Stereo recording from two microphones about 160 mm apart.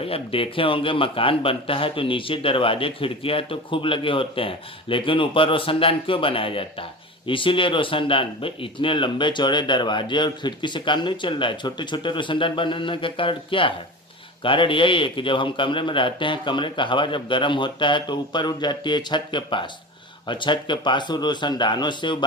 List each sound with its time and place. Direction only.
0.0 s speech: 35° left (ahead or behind)